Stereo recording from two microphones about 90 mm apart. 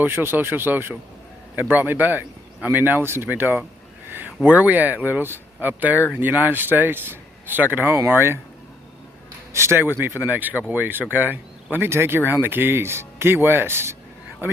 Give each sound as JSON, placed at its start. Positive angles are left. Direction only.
{"t": 0.0, "sound": "speech", "side_deg": -25}
{"t": 9.5, "sound": "speech", "side_deg": -30}